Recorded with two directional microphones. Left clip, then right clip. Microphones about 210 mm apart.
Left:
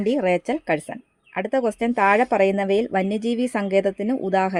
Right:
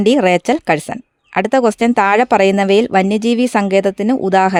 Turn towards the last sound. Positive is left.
turn(degrees=-55)  # may be behind; listen again after turning